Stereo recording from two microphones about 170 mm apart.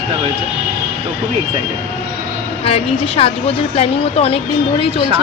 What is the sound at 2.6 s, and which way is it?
Speech, 35° left (ahead or behind).